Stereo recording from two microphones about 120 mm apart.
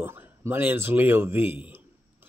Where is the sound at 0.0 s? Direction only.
20° right (ahead or behind).